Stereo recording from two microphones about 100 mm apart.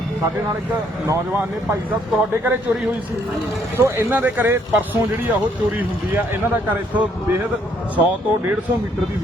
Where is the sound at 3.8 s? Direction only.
20° right (ahead or behind).